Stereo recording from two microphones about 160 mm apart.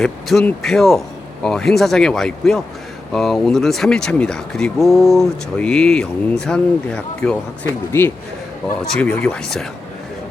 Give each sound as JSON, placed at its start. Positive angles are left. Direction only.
{"t": 0.0, "sound": "speech", "side_deg": 0}